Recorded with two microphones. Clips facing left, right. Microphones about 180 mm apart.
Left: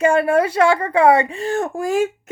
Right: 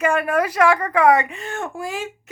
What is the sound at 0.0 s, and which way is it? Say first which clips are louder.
Speech: left 4 dB; 30° left (ahead or behind).